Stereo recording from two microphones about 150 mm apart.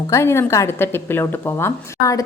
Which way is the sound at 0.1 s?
20° left (ahead or behind).